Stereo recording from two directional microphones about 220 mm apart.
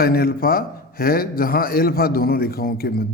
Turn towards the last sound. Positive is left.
turn(degrees=45)  # may be behind; listen again after turning